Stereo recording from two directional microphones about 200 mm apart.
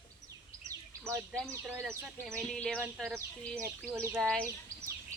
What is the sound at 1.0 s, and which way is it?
Speech, 15° right (ahead or behind).